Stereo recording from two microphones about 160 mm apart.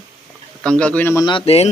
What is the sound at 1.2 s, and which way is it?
Speech, 35° left (ahead or behind).